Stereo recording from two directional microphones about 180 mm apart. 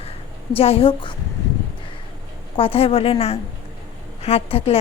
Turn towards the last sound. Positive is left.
turn(degrees=30)  # may be behind; listen again after turning